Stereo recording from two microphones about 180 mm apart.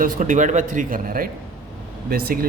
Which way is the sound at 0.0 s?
45° right (ahead or behind).